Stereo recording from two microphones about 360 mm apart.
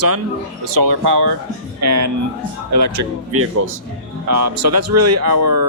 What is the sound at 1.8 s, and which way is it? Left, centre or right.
Speech, right.